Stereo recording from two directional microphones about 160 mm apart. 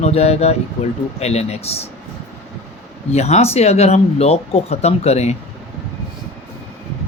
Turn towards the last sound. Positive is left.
turn(degrees=40)  # may be behind; listen again after turning